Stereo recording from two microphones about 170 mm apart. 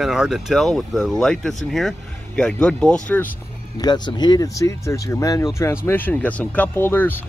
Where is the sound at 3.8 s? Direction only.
25° left (ahead or behind).